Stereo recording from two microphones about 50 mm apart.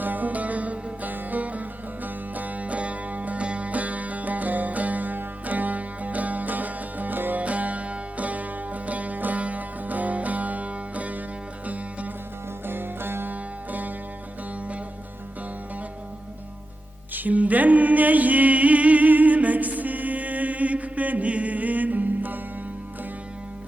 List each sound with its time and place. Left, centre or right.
0.0 s music: right
12.6 s music: right
13.3 s music: right
17.2 s music: right